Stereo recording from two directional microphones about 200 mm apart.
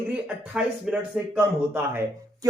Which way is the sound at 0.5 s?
5° right (ahead or behind).